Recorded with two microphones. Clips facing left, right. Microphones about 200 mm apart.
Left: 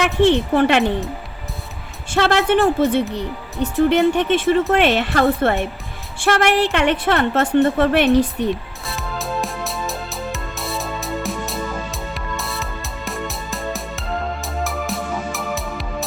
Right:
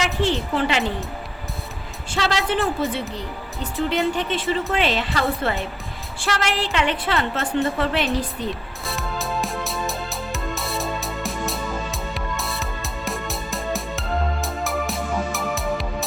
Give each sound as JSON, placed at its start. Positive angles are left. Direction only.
{"t": 0.0, "sound": "a woman's voice", "side_deg": 65}
{"t": 2.1, "sound": "a woman's voice", "side_deg": 55}
{"t": 2.5, "sound": "a woman's voice", "side_deg": 65}
{"t": 8.9, "sound": "music", "side_deg": 0}